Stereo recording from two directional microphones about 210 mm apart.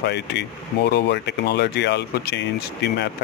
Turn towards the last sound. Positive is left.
turn(degrees=50)  # may be behind; listen again after turning